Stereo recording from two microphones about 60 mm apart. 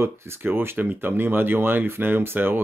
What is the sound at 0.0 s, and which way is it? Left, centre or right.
Speech, right.